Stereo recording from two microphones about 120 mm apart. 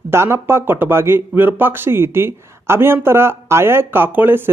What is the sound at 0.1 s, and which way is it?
Speech, 20° right (ahead or behind).